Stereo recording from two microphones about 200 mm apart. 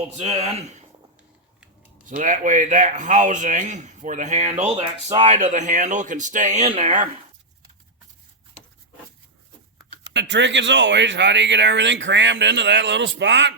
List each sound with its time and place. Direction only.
0.2 s a man's voice: 30° right (ahead or behind)
2.0 s a man's voice: 40° right (ahead or behind)
10.1 s speech: 60° right (ahead or behind)